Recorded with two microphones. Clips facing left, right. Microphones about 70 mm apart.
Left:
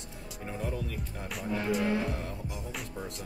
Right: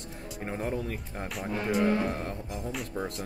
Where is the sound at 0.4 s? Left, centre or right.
Right.